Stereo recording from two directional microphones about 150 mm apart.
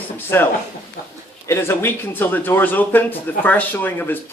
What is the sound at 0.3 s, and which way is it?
Speech, 15° left (ahead or behind).